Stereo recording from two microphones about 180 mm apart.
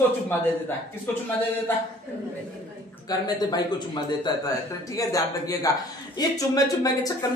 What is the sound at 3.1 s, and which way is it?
Speech, 25° left (ahead or behind).